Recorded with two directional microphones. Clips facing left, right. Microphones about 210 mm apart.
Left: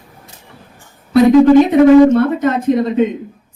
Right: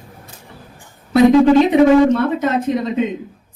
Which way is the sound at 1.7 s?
50° left (ahead or behind).